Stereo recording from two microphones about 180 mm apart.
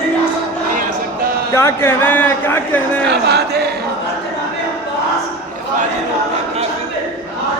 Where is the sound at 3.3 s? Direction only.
65° right (ahead or behind).